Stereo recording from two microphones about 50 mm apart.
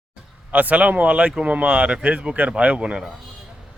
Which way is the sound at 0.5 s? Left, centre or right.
Right.